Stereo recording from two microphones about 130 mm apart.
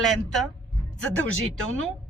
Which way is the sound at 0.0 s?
Centre (ahead or behind).